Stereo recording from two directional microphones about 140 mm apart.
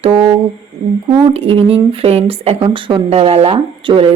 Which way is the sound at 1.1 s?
40° right (ahead or behind).